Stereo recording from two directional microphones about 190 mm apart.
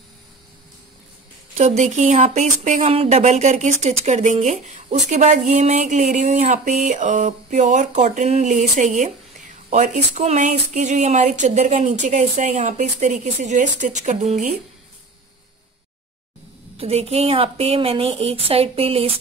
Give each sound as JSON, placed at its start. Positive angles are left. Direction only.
{"t": 1.6, "sound": "speech", "side_deg": -35}
{"t": 10.1, "sound": "speech", "side_deg": -40}
{"t": 16.7, "sound": "speech", "side_deg": -30}